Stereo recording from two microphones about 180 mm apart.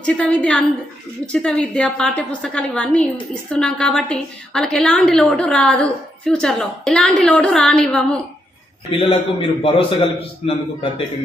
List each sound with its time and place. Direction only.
0.0 s a woman's voice: 5° left (ahead or behind)
8.9 s a man's voice: 30° left (ahead or behind)